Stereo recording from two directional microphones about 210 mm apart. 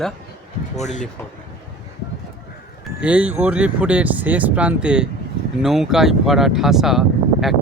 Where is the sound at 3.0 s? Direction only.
5° right (ahead or behind).